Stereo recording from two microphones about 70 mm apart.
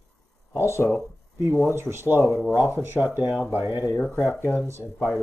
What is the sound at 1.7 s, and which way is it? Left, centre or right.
Speech, right.